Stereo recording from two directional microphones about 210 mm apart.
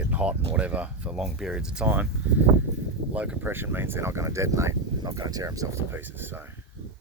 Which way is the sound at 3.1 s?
5° right (ahead or behind).